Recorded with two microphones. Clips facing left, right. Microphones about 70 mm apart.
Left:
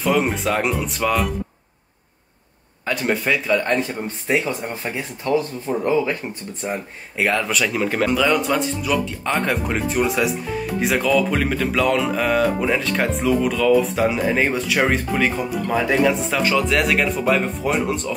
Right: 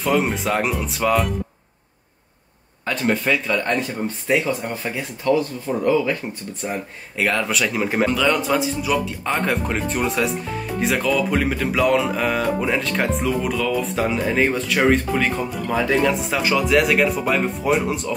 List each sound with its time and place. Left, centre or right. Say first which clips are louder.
0.0 s speech: left 1 dB; centre
2.8 s speech: even; centre
4.8 s speech: right 4 dB; left
5.7 s speech: even; centre
7.4 s speech: left 1 dB; centre
8.1 s speech: left 1 dB; centre